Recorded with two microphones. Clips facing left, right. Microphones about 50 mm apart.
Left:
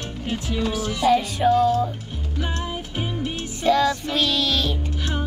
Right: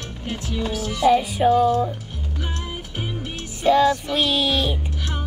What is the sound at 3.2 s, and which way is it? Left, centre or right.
Music, centre.